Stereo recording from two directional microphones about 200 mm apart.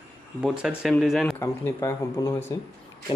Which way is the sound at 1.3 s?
10° left (ahead or behind).